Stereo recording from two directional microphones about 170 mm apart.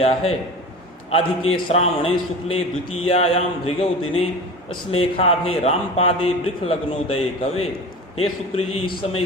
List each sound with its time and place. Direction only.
0.0 s a man's voice: 35° left (ahead or behind)